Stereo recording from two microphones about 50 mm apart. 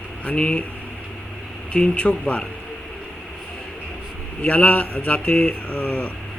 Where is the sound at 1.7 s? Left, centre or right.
Left.